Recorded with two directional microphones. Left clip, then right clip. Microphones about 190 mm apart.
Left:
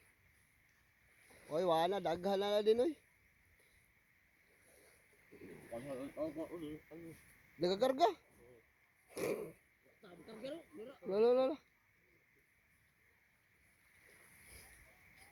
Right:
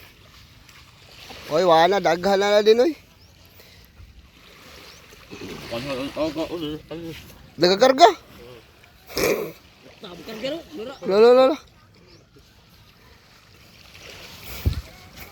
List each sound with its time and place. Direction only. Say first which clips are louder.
1.5 s speech: right 18 dB; 15° left (ahead or behind)
6.0 s speech: right 17 dB; 10° left (ahead or behind)
9.0 s a sound: right 18 dB; 15° left (ahead or behind)
10.8 s speech: right 18 dB; centre (ahead or behind)
11.1 s speech: right 18 dB; 10° left (ahead or behind)